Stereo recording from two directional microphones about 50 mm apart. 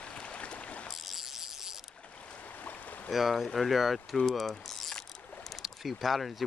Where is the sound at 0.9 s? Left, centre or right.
Centre.